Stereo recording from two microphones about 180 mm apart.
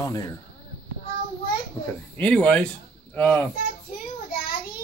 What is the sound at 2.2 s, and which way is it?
Speech, 10° left (ahead or behind).